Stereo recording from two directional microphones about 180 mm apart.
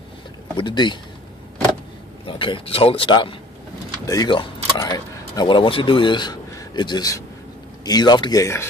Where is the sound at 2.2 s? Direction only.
30° left (ahead or behind).